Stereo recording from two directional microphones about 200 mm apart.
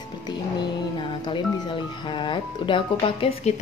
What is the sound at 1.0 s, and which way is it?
Speech, 25° left (ahead or behind).